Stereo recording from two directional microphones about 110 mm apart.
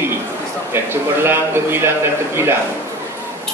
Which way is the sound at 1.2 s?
20° right (ahead or behind).